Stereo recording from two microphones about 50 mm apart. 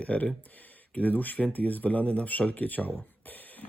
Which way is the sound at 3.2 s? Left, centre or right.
Left.